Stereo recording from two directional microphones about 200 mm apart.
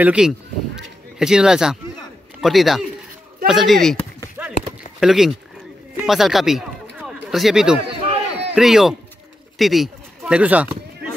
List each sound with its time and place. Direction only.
0.0 s speech: 5° right (ahead or behind)
4.4 s clip-clop: 5° right (ahead or behind)
5.0 s speech: centre (ahead or behind)
8.1 s a sound: 30° right (ahead or behind)
8.5 s speech: centre (ahead or behind)